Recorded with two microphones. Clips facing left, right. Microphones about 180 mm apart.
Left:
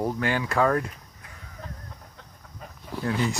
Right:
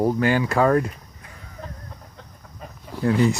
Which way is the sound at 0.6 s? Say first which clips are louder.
Right 4 dB; 25° right (ahead or behind).